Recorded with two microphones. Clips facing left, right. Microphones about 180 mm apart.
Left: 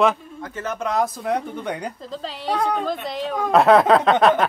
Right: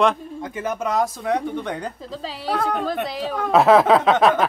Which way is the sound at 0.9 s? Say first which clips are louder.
Left 1 dB; centre (ahead or behind).